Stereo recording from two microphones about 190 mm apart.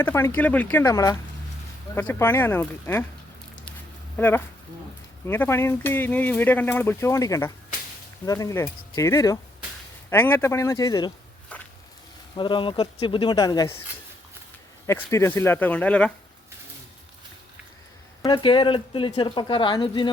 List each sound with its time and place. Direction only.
0.0 s speech: 15° left (ahead or behind)
4.2 s speech: 10° left (ahead or behind)
11.5 s a sound: 10° left (ahead or behind)
12.4 s speech: 25° left (ahead or behind)
14.8 s speech: 15° left (ahead or behind)
18.2 s speech: 25° left (ahead or behind)